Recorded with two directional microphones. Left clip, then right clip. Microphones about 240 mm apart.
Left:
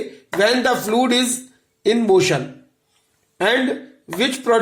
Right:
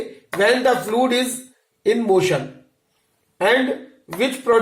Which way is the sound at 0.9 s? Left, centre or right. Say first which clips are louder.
Left 1 dB; left.